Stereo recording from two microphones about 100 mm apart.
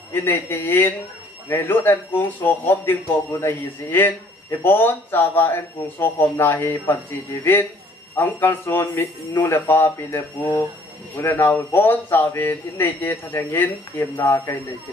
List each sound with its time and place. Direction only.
0.1 s a man's voice: 20° left (ahead or behind)
8.2 s a man's voice: 20° left (ahead or behind)